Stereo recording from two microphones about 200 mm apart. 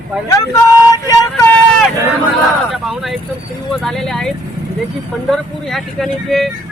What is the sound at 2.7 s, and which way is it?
Speech, centre (ahead or behind).